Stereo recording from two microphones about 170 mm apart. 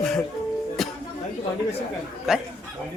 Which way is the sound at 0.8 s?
Centre (ahead or behind).